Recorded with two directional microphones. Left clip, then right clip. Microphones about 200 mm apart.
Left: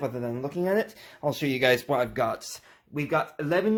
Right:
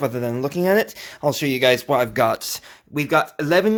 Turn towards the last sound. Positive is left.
turn(degrees=-35)  # may be behind; listen again after turning